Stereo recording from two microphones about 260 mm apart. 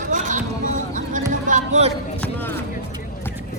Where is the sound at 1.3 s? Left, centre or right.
Right.